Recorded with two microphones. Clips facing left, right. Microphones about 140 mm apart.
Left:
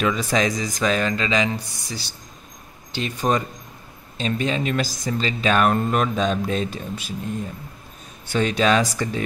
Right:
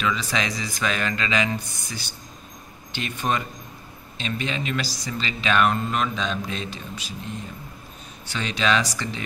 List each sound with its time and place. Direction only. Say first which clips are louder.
0.0 s speech: left 5 dB; 50° left (ahead or behind)